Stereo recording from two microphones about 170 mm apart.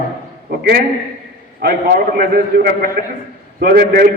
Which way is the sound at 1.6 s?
65° right (ahead or behind).